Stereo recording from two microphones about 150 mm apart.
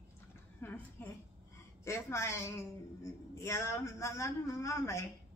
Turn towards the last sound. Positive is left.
turn(degrees=20)  # may be behind; listen again after turning